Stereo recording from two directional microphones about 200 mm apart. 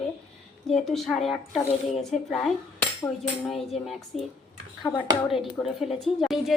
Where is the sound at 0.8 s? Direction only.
Centre (ahead or behind).